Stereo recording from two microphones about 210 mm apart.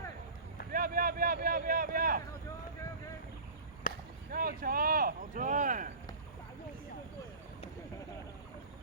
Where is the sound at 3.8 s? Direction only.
40° left (ahead or behind).